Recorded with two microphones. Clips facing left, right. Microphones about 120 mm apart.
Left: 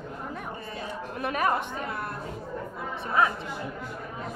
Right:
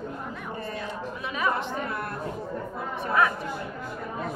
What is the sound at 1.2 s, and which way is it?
Speech, 55° left (ahead or behind).